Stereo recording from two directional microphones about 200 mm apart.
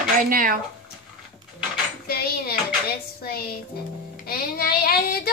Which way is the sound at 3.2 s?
50° left (ahead or behind).